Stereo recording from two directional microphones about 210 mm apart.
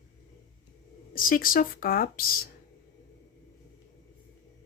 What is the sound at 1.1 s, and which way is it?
A woman's voice, 40° left (ahead or behind).